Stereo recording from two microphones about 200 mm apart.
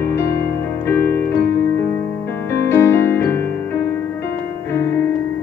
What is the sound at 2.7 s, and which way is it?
Music, 15° left (ahead or behind).